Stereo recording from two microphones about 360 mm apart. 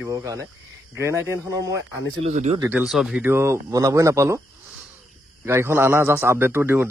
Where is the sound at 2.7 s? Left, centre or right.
Centre.